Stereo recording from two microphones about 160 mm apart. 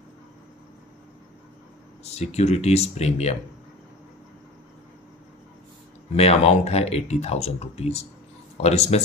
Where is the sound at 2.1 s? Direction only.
40° left (ahead or behind).